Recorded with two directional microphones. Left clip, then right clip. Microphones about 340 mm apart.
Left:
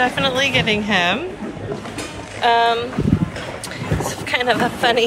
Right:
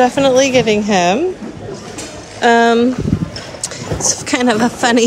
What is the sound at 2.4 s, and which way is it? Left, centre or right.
Speech, right.